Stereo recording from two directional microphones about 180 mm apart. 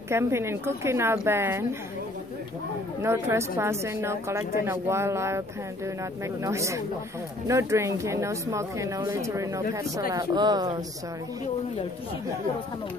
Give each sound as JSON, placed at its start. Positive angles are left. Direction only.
{"t": 0.1, "sound": "speech", "side_deg": -15}
{"t": 3.0, "sound": "speech", "side_deg": -15}
{"t": 6.4, "sound": "speech", "side_deg": -15}